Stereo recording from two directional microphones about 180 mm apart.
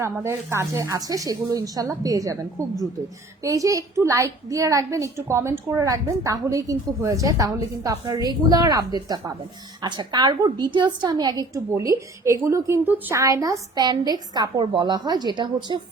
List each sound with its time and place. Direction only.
0.0 s a woman's voice: 15° right (ahead or behind)